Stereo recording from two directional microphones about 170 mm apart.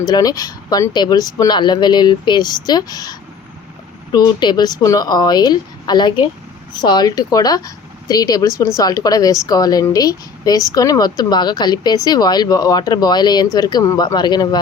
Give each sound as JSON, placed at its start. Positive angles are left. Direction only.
{"t": 0.1, "sound": "speech", "side_deg": 20}